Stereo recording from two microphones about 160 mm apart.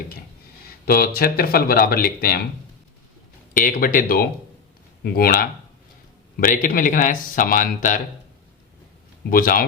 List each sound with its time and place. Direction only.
0.9 s speech: 70° left (ahead or behind)
3.5 s speech: 60° left (ahead or behind)
9.3 s speech: 60° left (ahead or behind)